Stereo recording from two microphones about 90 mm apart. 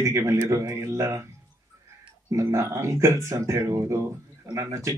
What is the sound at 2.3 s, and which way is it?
Speech, 35° right (ahead or behind).